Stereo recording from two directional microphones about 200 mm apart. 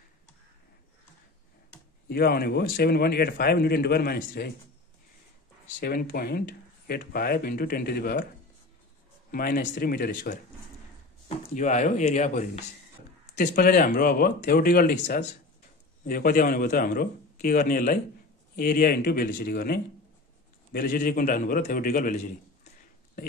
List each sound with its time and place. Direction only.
2.0 s a man's voice: 50° left (ahead or behind)
5.8 s a man's voice: 45° left (ahead or behind)
9.3 s a man's voice: 45° left (ahead or behind)
11.2 s speech: 35° left (ahead or behind)
13.3 s a man's voice: 50° left (ahead or behind)